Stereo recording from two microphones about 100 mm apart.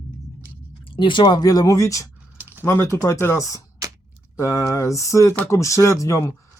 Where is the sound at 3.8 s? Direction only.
35° right (ahead or behind).